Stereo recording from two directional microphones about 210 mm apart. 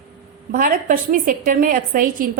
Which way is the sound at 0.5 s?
40° right (ahead or behind).